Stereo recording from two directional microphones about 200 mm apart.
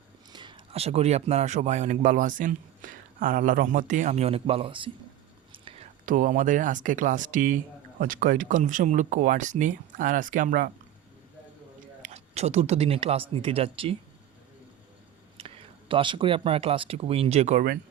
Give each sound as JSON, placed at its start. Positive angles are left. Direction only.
{"t": 0.3, "sound": "speech", "side_deg": -25}
{"t": 5.5, "sound": "whispering", "side_deg": -25}
{"t": 6.1, "sound": "speech", "side_deg": -40}
{"t": 12.0, "sound": "speech", "side_deg": -35}
{"t": 15.4, "sound": "speech", "side_deg": -25}